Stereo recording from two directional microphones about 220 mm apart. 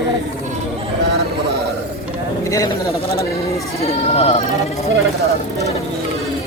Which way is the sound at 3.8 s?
30° left (ahead or behind).